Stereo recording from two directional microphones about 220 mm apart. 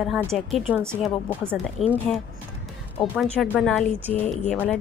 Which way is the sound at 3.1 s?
Centre (ahead or behind).